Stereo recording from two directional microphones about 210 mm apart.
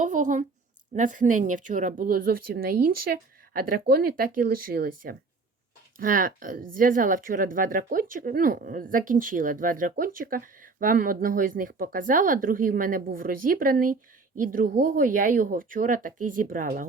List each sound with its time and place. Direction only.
0.0 s speech: 35° right (ahead or behind)